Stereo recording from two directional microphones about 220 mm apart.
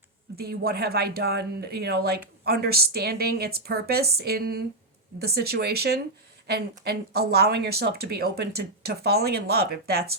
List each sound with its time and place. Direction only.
0.3 s speech: 45° right (ahead or behind)